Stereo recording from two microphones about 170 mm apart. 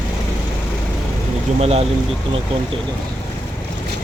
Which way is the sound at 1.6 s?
35° right (ahead or behind).